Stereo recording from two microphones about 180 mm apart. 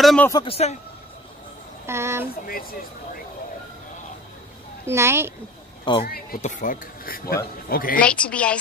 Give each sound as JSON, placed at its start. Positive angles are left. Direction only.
{"t": 0.0, "sound": "a man's voice", "side_deg": 5}
{"t": 0.3, "sound": "a man's voice", "side_deg": 30}
{"t": 1.9, "sound": "a child's voice", "side_deg": -15}
{"t": 2.4, "sound": "speech", "side_deg": 55}
{"t": 4.8, "sound": "a child's voice", "side_deg": -15}
{"t": 6.0, "sound": "speech", "side_deg": 55}
{"t": 8.0, "sound": "speech", "side_deg": 5}